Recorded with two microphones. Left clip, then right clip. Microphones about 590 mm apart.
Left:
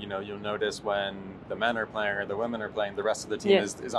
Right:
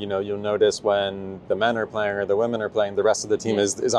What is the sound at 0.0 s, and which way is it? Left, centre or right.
Speech, right.